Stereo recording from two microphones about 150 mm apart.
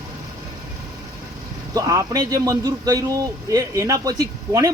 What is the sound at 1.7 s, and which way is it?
A man's voice, 20° right (ahead or behind).